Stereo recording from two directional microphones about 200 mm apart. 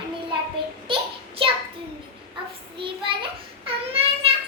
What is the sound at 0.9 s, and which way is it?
Child singing, 25° right (ahead or behind).